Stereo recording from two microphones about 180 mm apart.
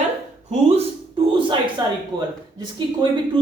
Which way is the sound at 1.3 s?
25° right (ahead or behind).